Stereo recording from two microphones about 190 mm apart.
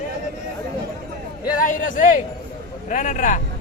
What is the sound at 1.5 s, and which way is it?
Speech, 45° left (ahead or behind).